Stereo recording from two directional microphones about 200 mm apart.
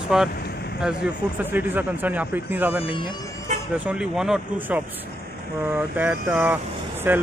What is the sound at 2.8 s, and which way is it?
Speech, 25° left (ahead or behind).